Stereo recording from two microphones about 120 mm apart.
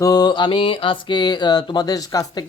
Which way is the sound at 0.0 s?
35° left (ahead or behind).